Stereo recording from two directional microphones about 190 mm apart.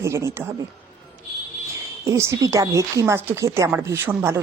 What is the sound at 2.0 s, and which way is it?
Speech, 15° right (ahead or behind).